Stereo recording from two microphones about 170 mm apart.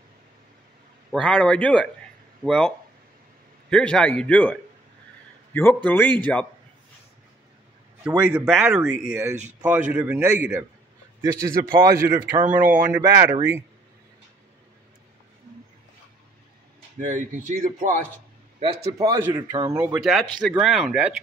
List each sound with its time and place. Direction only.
1.1 s speech: 5° left (ahead or behind)
3.7 s speech: 5° left (ahead or behind)
8.2 s a man's voice: 5° right (ahead or behind)
11.8 s speech: 25° right (ahead or behind)
12.4 s a man's voice: 10° right (ahead or behind)
13.0 s a man's voice: 20° right (ahead or behind)
17.0 s speech: 50° right (ahead or behind)
18.9 s speech: 20° right (ahead or behind)
19.8 s speech: 5° right (ahead or behind)